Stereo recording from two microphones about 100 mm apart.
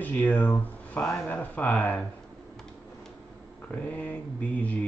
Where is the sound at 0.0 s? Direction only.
20° left (ahead or behind).